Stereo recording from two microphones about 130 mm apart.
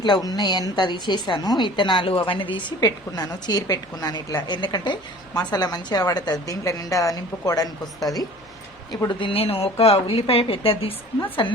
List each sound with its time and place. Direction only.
0.0 s a woman's voice: 35° left (ahead or behind)
9.0 s a woman's voice: 40° left (ahead or behind)